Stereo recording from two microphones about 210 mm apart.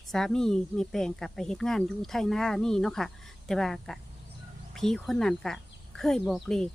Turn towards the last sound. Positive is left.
turn(degrees=0)  # may be behind; listen again after turning